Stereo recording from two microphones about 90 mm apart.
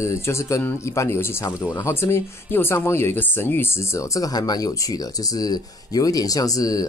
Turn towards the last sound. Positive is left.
turn(degrees=40)  # may be behind; listen again after turning